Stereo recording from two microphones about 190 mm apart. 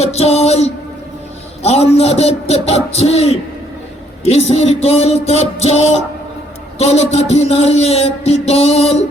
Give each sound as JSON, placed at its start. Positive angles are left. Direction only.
{"t": 0.0, "sound": "music", "side_deg": 35}
{"t": 1.6, "sound": "a man's voice", "side_deg": 35}